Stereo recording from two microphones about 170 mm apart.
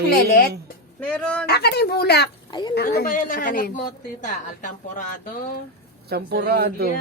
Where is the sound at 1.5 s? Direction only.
70° left (ahead or behind).